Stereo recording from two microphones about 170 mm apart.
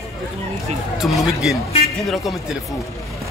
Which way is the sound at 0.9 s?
Centre (ahead or behind).